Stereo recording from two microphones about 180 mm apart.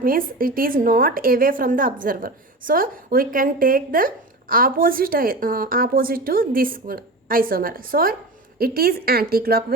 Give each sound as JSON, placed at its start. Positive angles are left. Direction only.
{"t": 0.0, "sound": "a woman's voice", "side_deg": -50}